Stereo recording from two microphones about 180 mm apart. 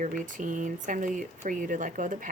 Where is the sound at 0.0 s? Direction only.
45° right (ahead or behind).